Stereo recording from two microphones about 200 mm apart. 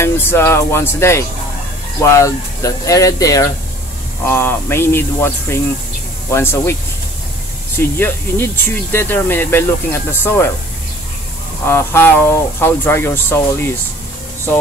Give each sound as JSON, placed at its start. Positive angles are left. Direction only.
{"t": 0.0, "sound": "speech", "side_deg": 10}
{"t": 11.6, "sound": "speech", "side_deg": 10}